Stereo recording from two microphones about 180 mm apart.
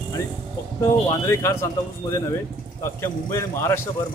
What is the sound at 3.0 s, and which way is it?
Speech, 15° left (ahead or behind).